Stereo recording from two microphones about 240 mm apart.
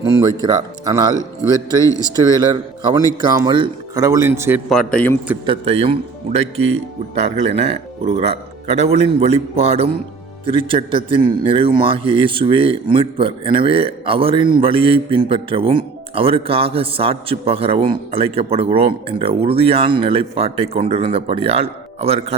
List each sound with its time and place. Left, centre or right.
0.0 s speech: centre
2.1 s speech: centre
4.7 s a man's voice: centre
5.5 s a man's voice: right